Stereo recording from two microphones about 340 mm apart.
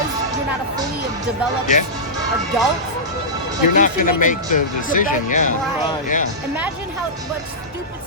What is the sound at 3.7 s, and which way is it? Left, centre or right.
Speech, left.